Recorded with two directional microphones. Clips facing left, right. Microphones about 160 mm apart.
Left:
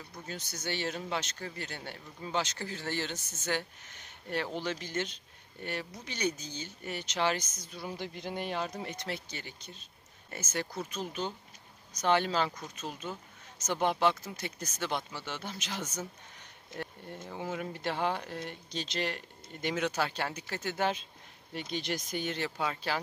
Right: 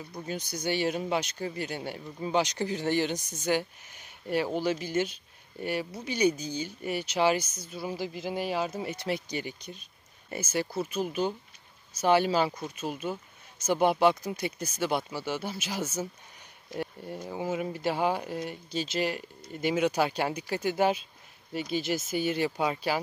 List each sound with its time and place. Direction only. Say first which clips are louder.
0.1 s speech: right 7 dB; 15° right (ahead or behind)